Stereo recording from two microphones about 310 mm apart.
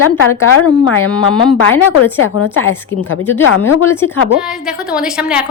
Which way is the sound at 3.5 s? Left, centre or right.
Left.